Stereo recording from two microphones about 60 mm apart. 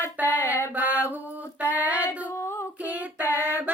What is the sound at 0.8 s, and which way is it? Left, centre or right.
Mantra, right.